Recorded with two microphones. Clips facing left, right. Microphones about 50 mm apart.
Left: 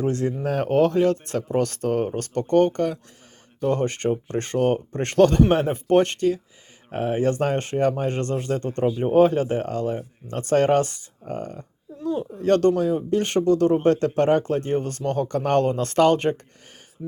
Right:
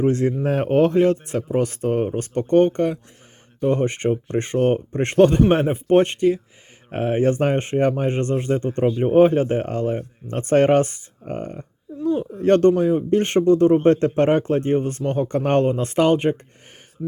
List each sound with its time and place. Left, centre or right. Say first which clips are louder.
0.0 s speech: right 4 dB; right